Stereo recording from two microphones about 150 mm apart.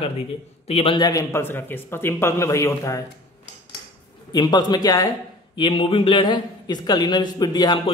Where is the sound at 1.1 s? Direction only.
20° left (ahead or behind).